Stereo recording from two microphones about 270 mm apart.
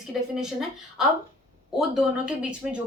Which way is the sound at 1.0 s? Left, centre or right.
Centre.